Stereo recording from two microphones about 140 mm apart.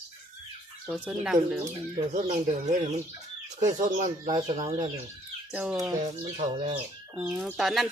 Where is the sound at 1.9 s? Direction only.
55° right (ahead or behind).